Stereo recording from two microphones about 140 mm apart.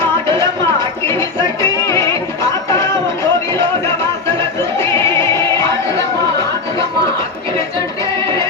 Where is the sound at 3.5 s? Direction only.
20° left (ahead or behind).